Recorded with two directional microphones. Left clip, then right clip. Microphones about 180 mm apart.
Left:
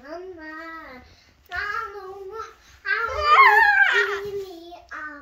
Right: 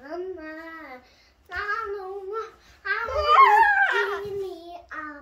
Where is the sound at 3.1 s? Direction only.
60° right (ahead or behind).